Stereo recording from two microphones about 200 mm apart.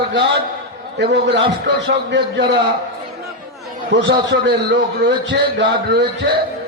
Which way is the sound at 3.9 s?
60° right (ahead or behind).